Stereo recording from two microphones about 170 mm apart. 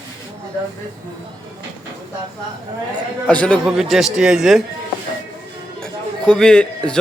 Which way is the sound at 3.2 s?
5° left (ahead or behind).